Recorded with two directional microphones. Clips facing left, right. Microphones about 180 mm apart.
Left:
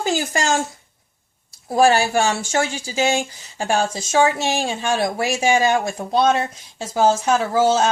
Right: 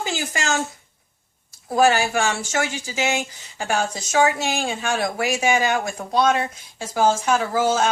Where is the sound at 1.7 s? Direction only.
30° left (ahead or behind).